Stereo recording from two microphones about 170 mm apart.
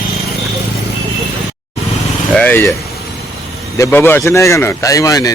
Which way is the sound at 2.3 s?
10° left (ahead or behind).